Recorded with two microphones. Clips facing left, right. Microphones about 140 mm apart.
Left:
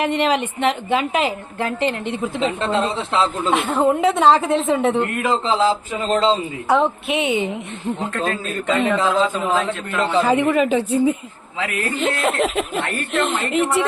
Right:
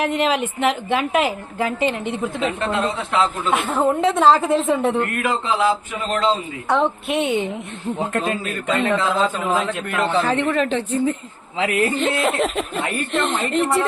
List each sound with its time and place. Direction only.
0.0 s a woman's voice: centre (ahead or behind)
2.4 s speech: 25° left (ahead or behind)
3.5 s a woman's voice: centre (ahead or behind)
4.9 s speech: 25° left (ahead or behind)
6.7 s a woman's voice: centre (ahead or behind)
8.1 s speech: 20° right (ahead or behind)
8.9 s a woman's voice: 10° left (ahead or behind)